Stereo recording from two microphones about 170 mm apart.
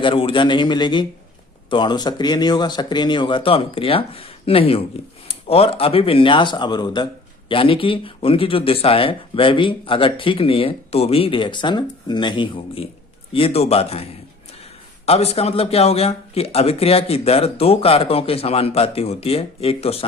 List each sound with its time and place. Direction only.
0.0 s speech: 30° left (ahead or behind)